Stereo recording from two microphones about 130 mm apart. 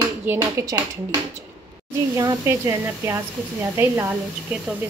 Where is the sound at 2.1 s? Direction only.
20° right (ahead or behind).